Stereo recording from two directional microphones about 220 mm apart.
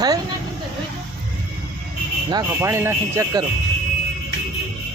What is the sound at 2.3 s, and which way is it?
Speech, 10° right (ahead or behind).